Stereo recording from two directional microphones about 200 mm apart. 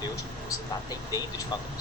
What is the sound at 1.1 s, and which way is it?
Speech, 20° left (ahead or behind).